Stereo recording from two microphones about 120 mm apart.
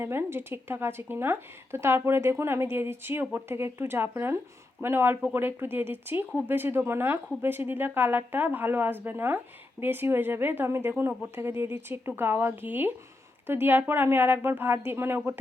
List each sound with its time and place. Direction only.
0.0 s speech: 20° right (ahead or behind)